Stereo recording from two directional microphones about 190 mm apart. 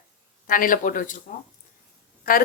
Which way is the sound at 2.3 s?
50° left (ahead or behind).